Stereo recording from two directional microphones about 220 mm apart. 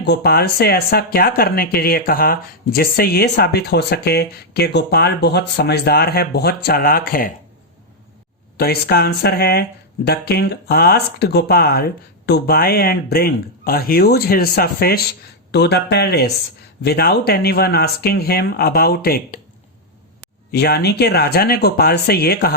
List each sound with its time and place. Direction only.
0.0 s speech: 50° left (ahead or behind)
8.5 s speech: 45° left (ahead or behind)
20.5 s speech: 45° left (ahead or behind)